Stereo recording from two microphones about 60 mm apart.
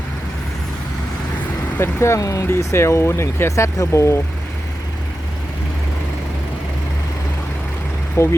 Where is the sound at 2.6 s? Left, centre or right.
Left.